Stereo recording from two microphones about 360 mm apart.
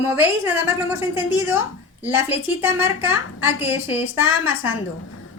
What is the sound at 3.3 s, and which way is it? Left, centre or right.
A woman's voice, centre.